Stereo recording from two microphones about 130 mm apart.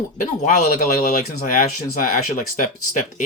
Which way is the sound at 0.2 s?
75° left (ahead or behind).